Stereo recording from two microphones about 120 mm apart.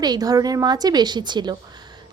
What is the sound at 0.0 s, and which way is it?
Speech, 35° right (ahead or behind).